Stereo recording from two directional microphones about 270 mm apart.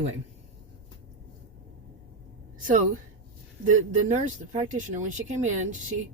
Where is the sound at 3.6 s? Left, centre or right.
Right.